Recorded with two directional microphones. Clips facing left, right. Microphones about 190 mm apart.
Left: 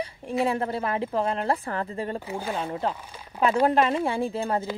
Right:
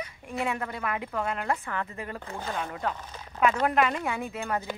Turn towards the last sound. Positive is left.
turn(degrees=30)  # may be behind; listen again after turning